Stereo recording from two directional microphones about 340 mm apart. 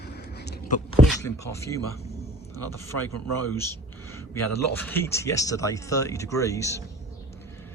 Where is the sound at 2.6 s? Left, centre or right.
Left.